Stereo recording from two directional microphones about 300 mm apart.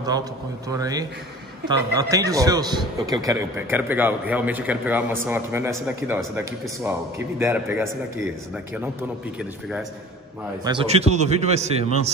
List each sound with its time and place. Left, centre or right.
0.7 s a man's voice: centre
9.4 s a man's voice: centre
10.6 s a man's voice: centre